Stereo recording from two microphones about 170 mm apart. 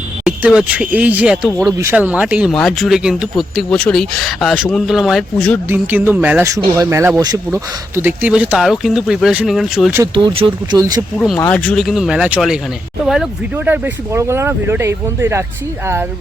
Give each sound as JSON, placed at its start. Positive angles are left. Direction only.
{"t": 0.3, "sound": "speech", "side_deg": -5}
{"t": 5.6, "sound": "speech", "side_deg": -10}
{"t": 9.9, "sound": "speech", "side_deg": -20}
{"t": 11.3, "sound": "speech", "side_deg": 10}